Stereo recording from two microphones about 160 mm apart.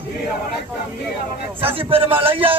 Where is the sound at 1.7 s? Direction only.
35° right (ahead or behind).